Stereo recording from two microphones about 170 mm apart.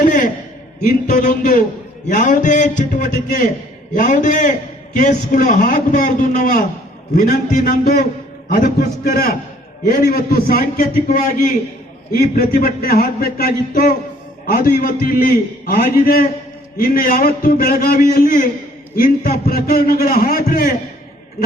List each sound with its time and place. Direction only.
0.0 s a sound: 55° left (ahead or behind)
1.0 s a man's voice: 50° left (ahead or behind)
7.2 s a man's voice: 60° left (ahead or behind)